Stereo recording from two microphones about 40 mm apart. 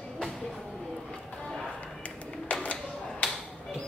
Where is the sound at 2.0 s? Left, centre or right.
Left.